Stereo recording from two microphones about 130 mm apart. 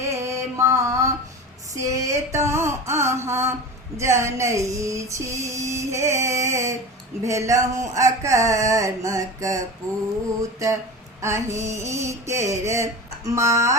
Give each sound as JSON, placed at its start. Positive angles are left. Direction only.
{"t": 0.0, "sound": "mantra", "side_deg": -20}
{"t": 1.7, "sound": "female singing", "side_deg": -25}